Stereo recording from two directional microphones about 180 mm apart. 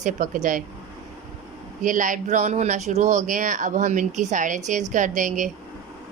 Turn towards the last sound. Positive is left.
turn(degrees=-45)  # may be behind; listen again after turning